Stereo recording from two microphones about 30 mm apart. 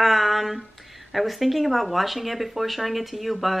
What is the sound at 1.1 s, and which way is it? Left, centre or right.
Speech, centre.